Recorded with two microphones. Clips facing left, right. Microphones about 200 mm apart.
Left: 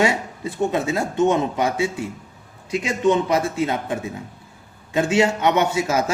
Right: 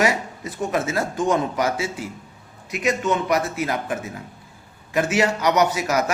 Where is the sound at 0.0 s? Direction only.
25° left (ahead or behind).